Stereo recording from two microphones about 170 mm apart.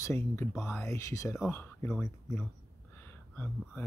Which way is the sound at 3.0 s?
10° left (ahead or behind).